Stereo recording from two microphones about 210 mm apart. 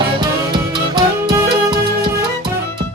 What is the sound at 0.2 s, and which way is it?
Music, 20° right (ahead or behind).